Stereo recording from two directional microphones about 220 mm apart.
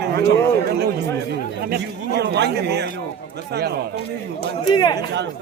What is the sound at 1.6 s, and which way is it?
A man's voice, 50° right (ahead or behind).